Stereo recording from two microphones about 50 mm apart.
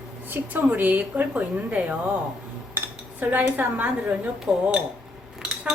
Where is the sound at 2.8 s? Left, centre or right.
Right.